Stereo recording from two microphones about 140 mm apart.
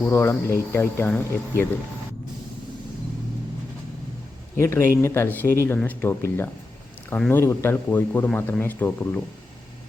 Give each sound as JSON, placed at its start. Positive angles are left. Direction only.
{"t": 0.0, "sound": "a man's voice", "side_deg": 15}
{"t": 4.5, "sound": "a man's voice", "side_deg": 15}